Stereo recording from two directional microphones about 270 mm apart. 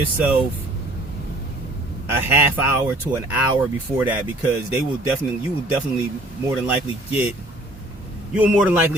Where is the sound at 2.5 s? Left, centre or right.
Centre.